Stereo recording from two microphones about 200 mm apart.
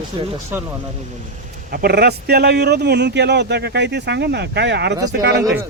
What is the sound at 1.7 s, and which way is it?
Speech, 50° right (ahead or behind).